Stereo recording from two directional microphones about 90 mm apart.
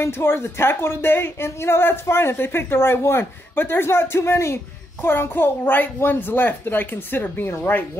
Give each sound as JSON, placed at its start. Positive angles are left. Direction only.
{"t": 0.0, "sound": "speech", "side_deg": 30}